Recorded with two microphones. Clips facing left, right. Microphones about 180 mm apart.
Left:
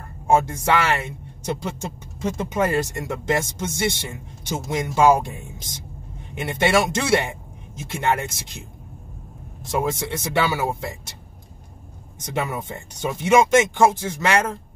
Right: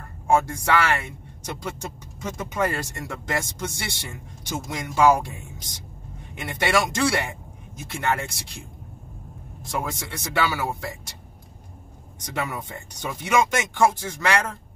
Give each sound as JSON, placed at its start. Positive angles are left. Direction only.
{"t": 0.3, "sound": "speech", "side_deg": 20}
{"t": 9.7, "sound": "speech", "side_deg": 25}
{"t": 12.4, "sound": "speech", "side_deg": 20}